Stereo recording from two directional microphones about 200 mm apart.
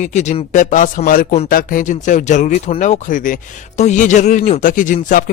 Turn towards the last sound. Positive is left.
turn(degrees=40)  # may be behind; listen again after turning